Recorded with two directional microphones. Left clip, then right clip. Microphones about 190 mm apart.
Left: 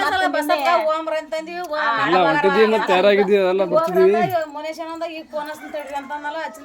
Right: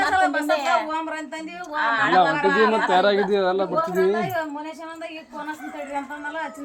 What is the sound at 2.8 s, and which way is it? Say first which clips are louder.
Speech: left 4 dB; 25° left (ahead or behind).